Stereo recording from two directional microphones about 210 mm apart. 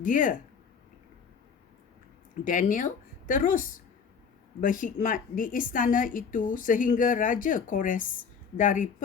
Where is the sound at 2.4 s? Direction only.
40° left (ahead or behind).